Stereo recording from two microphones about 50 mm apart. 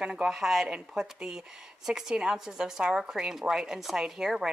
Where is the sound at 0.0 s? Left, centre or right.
Centre.